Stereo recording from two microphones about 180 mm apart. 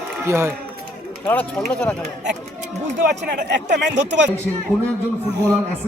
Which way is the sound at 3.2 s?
70° right (ahead or behind).